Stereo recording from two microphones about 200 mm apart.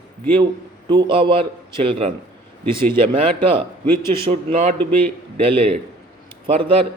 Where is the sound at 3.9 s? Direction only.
15° left (ahead or behind).